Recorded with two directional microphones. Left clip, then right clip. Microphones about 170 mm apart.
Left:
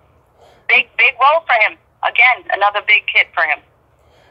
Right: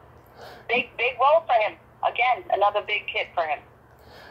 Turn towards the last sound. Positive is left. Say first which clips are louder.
# left 12 dB
turn(degrees=35)  # may be behind; listen again after turning